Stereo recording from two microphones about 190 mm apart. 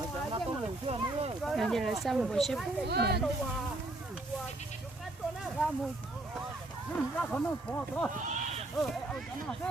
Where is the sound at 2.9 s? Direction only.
60° right (ahead or behind).